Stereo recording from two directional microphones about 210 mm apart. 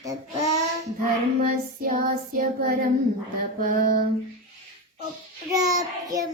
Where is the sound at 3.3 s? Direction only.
40° right (ahead or behind).